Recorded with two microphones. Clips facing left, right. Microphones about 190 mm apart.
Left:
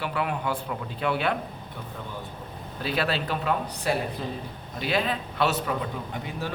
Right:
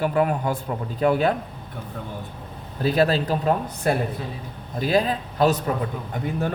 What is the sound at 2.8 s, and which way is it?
A man's voice, 40° right (ahead or behind).